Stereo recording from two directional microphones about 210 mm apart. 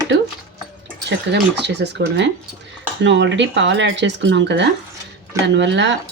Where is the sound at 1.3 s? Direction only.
55° right (ahead or behind).